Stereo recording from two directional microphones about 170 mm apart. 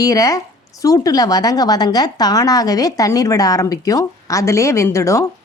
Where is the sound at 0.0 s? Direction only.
20° left (ahead or behind).